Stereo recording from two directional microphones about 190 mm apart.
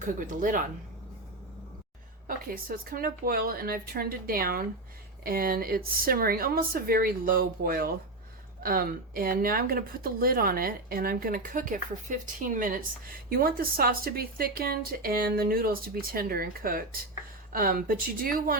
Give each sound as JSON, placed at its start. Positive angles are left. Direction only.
{"t": 0.0, "sound": "speech", "side_deg": -45}
{"t": 2.2, "sound": "speech", "side_deg": -50}